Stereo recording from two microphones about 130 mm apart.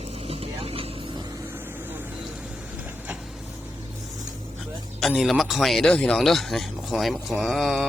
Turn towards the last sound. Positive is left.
turn(degrees=0)  # may be behind; listen again after turning